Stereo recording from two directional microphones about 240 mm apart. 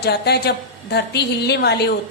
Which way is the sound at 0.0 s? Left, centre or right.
Left.